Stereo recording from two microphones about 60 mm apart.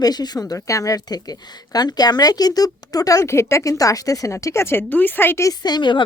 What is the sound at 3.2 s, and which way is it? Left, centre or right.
Speech, left.